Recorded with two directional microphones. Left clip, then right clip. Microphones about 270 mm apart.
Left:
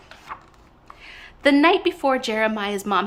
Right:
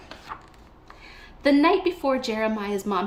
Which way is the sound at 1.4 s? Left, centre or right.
Centre.